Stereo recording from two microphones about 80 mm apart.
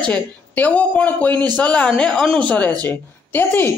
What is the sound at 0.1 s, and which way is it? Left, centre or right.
A man's voice, centre.